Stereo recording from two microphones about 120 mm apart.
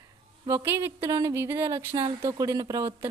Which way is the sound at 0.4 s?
20° right (ahead or behind).